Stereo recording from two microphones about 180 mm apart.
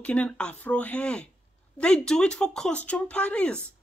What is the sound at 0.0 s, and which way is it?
A woman's voice, 5° left (ahead or behind).